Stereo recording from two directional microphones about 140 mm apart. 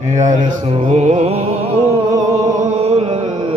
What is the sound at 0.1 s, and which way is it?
Speech, 60° right (ahead or behind).